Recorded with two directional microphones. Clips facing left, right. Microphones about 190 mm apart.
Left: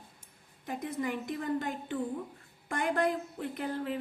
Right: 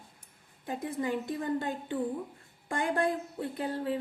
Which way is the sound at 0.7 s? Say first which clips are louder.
Right 2 dB; 30° right (ahead or behind).